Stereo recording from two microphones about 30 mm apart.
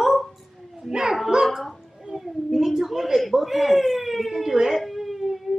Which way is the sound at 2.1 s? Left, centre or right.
Right.